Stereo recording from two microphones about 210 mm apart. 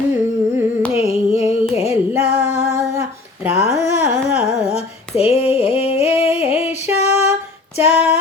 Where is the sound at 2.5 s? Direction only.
35° left (ahead or behind).